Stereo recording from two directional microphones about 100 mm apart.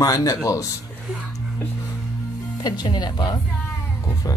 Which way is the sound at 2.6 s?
45° left (ahead or behind).